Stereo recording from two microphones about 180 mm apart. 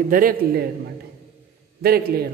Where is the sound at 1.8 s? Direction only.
60° right (ahead or behind).